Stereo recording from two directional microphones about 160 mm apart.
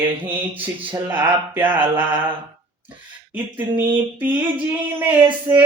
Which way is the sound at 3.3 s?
10° right (ahead or behind).